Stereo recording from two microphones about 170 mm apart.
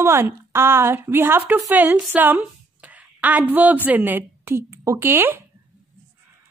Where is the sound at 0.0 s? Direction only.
15° right (ahead or behind).